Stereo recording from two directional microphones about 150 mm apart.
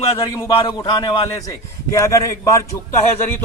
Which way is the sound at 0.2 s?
20° left (ahead or behind).